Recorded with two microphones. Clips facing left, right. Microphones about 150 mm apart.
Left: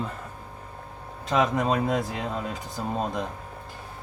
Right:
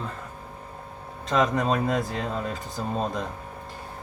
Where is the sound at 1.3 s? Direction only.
5° left (ahead or behind).